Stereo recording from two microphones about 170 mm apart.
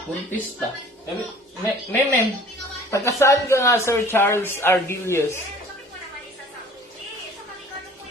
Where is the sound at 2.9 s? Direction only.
15° left (ahead or behind).